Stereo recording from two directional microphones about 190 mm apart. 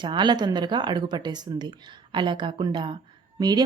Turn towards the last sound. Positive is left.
turn(degrees=-20)  # may be behind; listen again after turning